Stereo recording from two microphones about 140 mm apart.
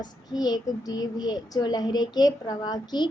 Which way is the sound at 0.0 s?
30° left (ahead or behind).